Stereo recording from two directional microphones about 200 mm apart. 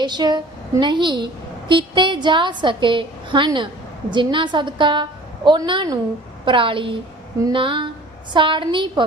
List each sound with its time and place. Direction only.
0.0 s a woman's voice: 20° right (ahead or behind)